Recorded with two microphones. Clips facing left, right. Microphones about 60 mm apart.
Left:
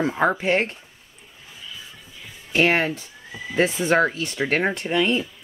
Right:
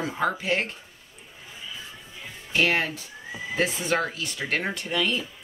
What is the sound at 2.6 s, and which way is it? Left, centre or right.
Speech, left.